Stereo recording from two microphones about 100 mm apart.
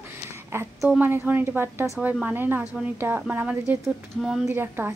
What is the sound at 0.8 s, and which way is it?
A woman's voice, 20° right (ahead or behind).